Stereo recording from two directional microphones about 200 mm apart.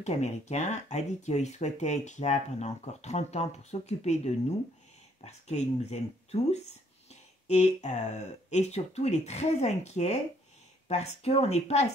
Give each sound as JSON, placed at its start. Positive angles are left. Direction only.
{"t": 0.0, "sound": "speech", "side_deg": 35}